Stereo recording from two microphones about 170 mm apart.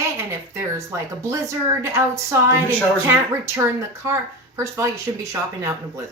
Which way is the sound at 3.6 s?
20° right (ahead or behind).